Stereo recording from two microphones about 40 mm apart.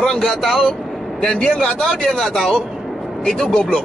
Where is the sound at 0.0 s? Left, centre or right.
Centre.